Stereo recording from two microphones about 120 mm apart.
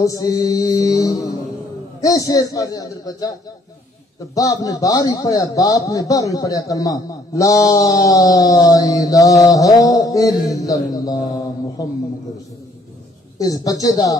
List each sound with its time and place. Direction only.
0.0 s a man's voice: 30° left (ahead or behind)
4.4 s a man's voice: 30° left (ahead or behind)
13.4 s speech: 30° left (ahead or behind)